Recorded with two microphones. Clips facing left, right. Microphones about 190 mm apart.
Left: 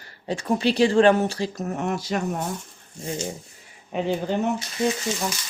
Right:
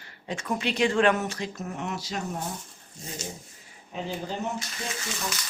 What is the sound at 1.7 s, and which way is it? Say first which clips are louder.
Speech: left 7 dB; 50° left (ahead or behind).